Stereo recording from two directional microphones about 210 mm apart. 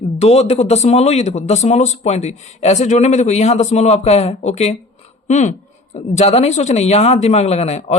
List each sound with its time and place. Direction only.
0.2 s speech: 30° left (ahead or behind)